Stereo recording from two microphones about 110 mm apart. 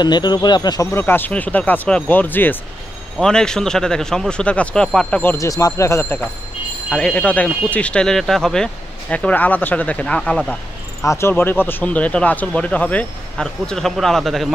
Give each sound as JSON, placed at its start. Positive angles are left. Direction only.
{"t": 0.0, "sound": "speech", "side_deg": 40}
{"t": 0.9, "sound": "speech", "side_deg": 20}
{"t": 3.2, "sound": "speech", "side_deg": 5}
{"t": 5.4, "sound": "speech", "side_deg": 30}
{"t": 6.9, "sound": "speech", "side_deg": 10}
{"t": 11.0, "sound": "speech", "side_deg": 25}